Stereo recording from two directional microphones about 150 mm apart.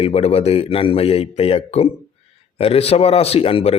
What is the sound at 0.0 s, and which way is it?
Speech, 45° left (ahead or behind).